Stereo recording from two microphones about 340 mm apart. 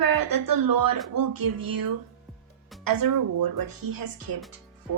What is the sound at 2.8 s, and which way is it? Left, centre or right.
Speech, right.